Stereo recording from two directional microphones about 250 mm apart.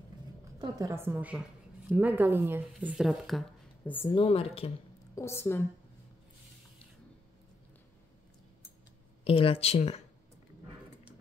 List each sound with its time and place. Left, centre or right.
0.6 s a woman's voice: centre
4.1 s speech: left
5.2 s a woman's voice: centre
9.2 s speech: left